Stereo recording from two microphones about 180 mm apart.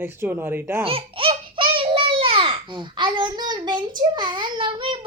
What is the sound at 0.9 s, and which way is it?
Laughter, 30° right (ahead or behind).